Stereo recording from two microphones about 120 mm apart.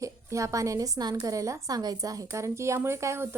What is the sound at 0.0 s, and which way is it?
A woman's voice, 25° right (ahead or behind).